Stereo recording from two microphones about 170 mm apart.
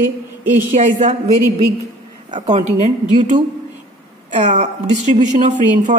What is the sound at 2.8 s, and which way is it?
A woman's voice, 45° right (ahead or behind).